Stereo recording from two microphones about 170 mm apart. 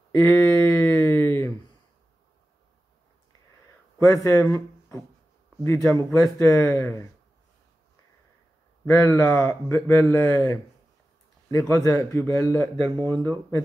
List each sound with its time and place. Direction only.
0.1 s a sound: 10° left (ahead or behind)
4.0 s speech: 15° left (ahead or behind)
6.4 s speech: 15° left (ahead or behind)
8.8 s speech: 20° left (ahead or behind)